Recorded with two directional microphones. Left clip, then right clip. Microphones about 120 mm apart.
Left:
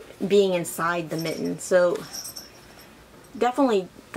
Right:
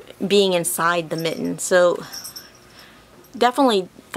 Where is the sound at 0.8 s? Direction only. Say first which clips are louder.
Right 6 dB; 50° right (ahead or behind).